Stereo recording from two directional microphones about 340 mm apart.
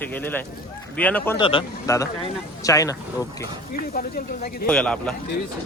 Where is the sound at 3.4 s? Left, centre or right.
Left.